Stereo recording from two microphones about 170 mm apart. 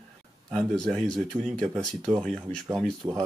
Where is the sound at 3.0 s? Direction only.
20° right (ahead or behind).